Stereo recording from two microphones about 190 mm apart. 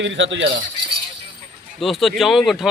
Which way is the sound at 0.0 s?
75° right (ahead or behind).